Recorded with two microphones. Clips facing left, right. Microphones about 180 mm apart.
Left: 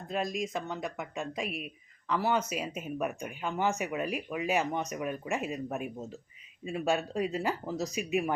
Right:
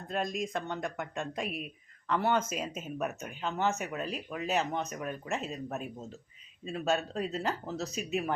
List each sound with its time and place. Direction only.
0.1 s speech: centre (ahead or behind)